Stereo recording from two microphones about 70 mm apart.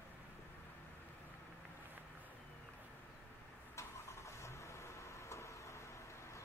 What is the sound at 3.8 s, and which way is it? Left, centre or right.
Vehicle, left.